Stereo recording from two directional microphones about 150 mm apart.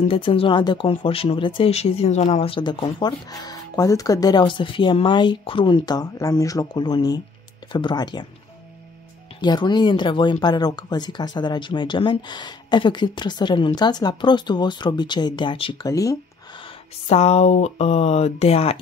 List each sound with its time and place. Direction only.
0.1 s speech: 35° left (ahead or behind)
9.4 s speech: 30° left (ahead or behind)
15.9 s speech: 20° left (ahead or behind)
17.1 s speech: 45° left (ahead or behind)